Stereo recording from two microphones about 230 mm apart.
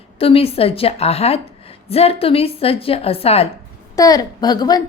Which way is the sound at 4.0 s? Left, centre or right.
Centre.